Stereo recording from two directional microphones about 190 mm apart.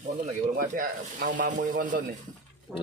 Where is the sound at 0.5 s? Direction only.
50° right (ahead or behind).